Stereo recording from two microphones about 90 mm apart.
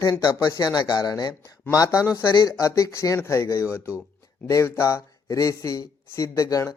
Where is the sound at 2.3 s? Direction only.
50° left (ahead or behind).